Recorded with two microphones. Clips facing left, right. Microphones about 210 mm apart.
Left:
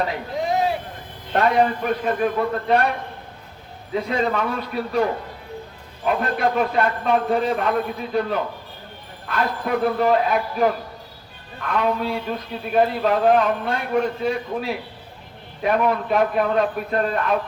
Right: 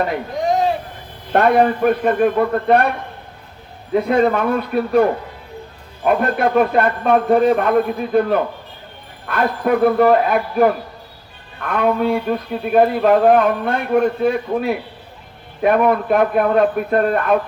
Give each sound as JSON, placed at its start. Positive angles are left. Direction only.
{"t": 1.3, "sound": "a man's voice", "side_deg": -55}
{"t": 3.9, "sound": "a man's voice", "side_deg": -55}